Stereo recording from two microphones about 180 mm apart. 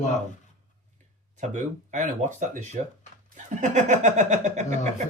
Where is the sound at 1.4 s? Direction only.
45° right (ahead or behind).